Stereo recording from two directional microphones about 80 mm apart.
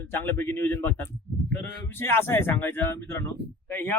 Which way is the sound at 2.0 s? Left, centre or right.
Left.